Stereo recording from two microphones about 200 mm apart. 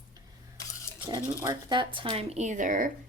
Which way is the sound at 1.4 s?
20° right (ahead or behind).